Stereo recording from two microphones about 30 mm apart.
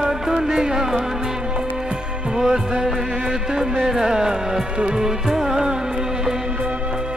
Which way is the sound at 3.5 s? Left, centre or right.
Right.